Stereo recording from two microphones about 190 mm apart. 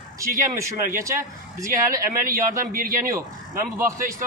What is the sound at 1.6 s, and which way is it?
A man's voice, 45° right (ahead or behind).